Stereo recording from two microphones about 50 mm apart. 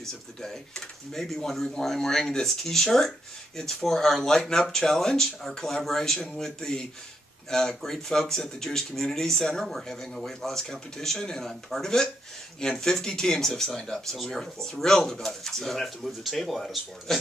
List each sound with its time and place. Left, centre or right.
0.0 s speech: centre
6.1 s speech: centre